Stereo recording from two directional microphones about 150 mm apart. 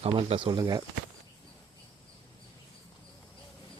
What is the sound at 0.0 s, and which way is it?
Speech, 40° right (ahead or behind).